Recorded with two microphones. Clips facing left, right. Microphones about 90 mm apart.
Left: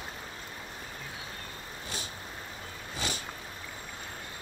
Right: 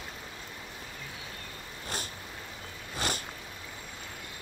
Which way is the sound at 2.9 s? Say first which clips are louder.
Right 3 dB; 50° right (ahead or behind).